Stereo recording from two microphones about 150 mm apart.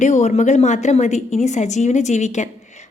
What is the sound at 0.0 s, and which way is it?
A woman's voice, 50° left (ahead or behind).